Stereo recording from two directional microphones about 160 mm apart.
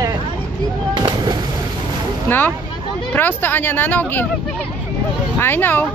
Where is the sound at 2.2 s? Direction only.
10° left (ahead or behind).